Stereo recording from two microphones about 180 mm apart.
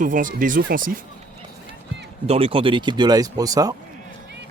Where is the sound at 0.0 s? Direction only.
45° right (ahead or behind).